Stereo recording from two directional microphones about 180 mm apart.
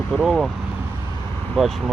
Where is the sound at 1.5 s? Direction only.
Centre (ahead or behind).